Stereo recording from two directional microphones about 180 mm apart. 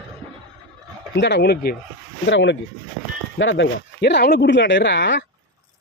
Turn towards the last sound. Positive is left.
turn(degrees=80)